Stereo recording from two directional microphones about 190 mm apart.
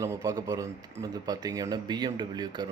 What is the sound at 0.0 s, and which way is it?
Speech, 15° right (ahead or behind).